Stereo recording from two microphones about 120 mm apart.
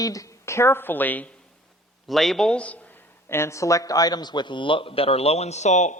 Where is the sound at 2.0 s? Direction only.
Centre (ahead or behind).